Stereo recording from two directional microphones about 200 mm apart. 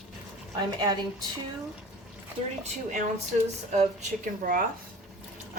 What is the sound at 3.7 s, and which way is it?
Speech, 40° right (ahead or behind).